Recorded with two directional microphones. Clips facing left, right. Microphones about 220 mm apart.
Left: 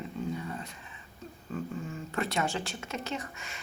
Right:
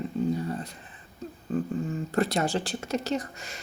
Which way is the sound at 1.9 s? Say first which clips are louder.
Right 7 dB; 35° right (ahead or behind).